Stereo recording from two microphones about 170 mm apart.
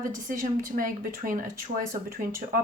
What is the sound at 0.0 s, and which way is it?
A woman's voice, 50° right (ahead or behind).